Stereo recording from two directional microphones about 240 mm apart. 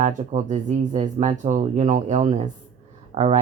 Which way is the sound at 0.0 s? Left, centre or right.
Right.